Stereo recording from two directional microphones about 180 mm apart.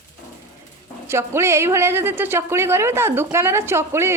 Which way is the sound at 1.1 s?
15° right (ahead or behind).